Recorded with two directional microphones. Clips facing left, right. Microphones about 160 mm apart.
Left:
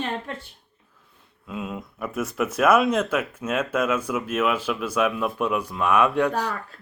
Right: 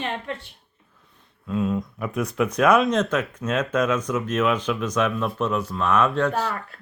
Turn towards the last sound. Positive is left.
turn(degrees=15)  # may be behind; listen again after turning